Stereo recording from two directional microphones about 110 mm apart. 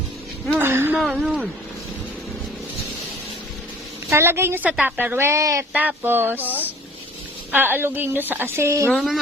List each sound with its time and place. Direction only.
0.6 s a sound: 20° right (ahead or behind)
0.9 s speech: centre (ahead or behind)
4.1 s a woman's voice: 20° right (ahead or behind)
5.7 s a woman's voice: 15° right (ahead or behind)
6.4 s speech: 15° left (ahead or behind)
7.5 s a woman's voice: 20° right (ahead or behind)
8.9 s speech: centre (ahead or behind)